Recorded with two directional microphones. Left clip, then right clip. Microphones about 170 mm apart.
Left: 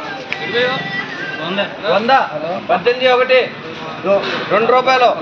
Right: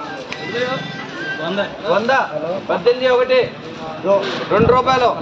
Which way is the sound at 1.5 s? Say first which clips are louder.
Left 2 dB; 20° right (ahead or behind).